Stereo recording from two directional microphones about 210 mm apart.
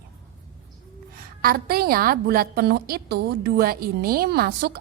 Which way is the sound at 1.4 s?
45° right (ahead or behind).